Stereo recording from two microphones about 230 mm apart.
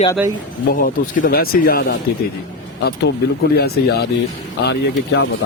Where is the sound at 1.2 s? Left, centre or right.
Left.